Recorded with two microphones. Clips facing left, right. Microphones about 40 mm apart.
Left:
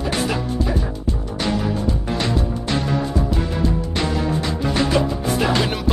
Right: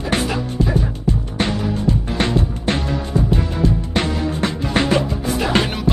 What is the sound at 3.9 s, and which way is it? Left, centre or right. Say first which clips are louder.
Music: right 1 dB; right.